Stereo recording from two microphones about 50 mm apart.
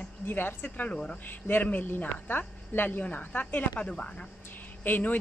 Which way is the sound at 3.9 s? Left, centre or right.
Centre.